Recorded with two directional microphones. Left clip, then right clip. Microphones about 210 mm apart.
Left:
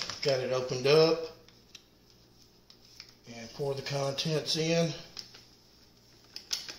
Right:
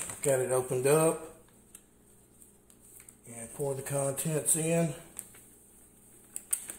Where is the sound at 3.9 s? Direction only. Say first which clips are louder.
Left 1 dB; 20° right (ahead or behind).